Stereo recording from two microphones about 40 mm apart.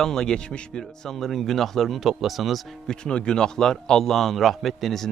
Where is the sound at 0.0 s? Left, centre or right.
Centre.